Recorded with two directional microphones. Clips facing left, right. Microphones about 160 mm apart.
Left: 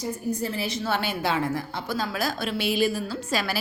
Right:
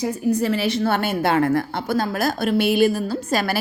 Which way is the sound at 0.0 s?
70° right (ahead or behind).